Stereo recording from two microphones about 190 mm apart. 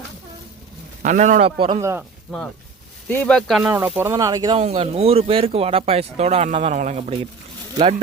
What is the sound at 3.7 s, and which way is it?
Speech, 10° right (ahead or behind).